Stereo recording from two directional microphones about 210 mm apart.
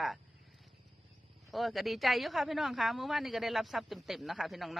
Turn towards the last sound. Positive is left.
turn(degrees=0)  # may be behind; listen again after turning